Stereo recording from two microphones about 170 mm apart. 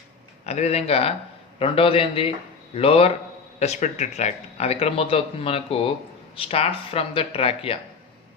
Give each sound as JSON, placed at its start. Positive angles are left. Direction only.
{"t": 0.4, "sound": "speech", "side_deg": 40}